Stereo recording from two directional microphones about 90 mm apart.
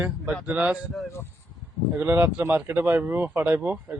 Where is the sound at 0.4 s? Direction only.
15° right (ahead or behind).